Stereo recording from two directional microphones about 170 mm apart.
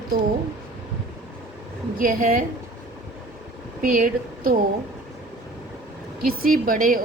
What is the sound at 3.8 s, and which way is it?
Speech, 55° right (ahead or behind).